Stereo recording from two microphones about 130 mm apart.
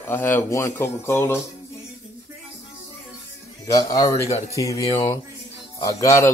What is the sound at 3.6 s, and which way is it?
Speech, 25° left (ahead or behind).